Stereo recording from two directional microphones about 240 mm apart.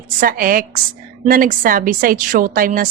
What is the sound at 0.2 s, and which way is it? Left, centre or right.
A woman's voice, right.